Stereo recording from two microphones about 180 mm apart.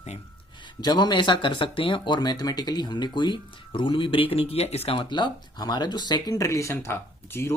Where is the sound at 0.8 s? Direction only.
25° left (ahead or behind).